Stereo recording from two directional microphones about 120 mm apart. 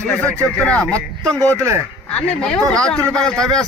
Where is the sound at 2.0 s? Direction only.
10° left (ahead or behind).